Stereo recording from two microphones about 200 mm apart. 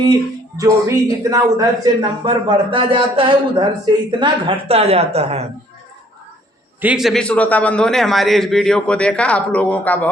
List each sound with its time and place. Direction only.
0.5 s a man's voice: 15° right (ahead or behind); by 5.5 s 30° right (ahead or behind)
6.8 s a man's voice: centre (ahead or behind)